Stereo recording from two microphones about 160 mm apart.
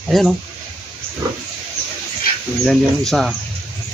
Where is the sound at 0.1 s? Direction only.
Centre (ahead or behind).